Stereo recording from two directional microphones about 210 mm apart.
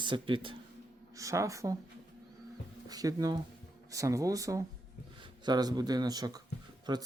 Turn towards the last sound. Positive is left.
turn(degrees=-20)  # may be behind; listen again after turning